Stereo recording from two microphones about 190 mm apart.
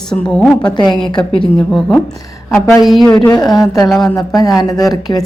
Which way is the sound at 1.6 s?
Centre (ahead or behind).